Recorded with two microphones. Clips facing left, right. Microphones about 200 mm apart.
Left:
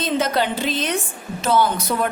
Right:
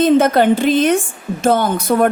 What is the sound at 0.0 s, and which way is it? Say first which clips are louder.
A woman's voice: right 9 dB; 55° right (ahead or behind).